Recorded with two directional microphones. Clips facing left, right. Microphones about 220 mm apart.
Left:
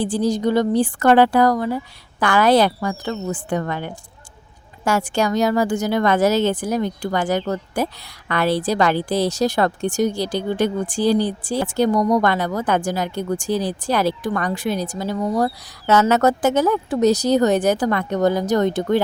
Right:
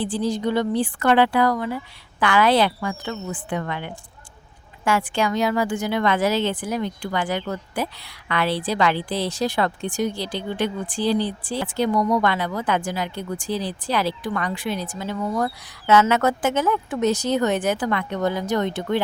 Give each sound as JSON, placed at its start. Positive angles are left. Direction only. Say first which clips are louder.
{"t": 0.0, "sound": "a woman's voice", "louder": "left 4 dB", "side_deg": 45}